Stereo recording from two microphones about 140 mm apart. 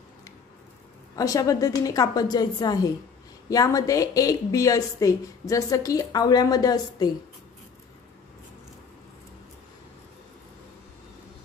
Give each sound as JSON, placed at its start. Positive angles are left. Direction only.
{"t": 1.1, "sound": "a woman's voice", "side_deg": 25}